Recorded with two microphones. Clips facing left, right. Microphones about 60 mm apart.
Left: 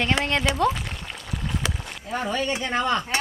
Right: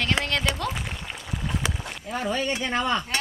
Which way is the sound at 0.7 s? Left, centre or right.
Centre.